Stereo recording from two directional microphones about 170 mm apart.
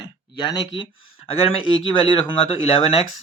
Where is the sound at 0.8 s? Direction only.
35° left (ahead or behind).